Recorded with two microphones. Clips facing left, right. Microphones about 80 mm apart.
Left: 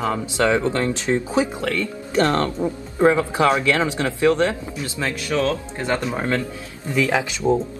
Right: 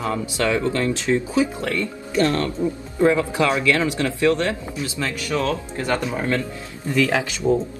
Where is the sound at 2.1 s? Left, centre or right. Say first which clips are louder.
Left 1 dB; left.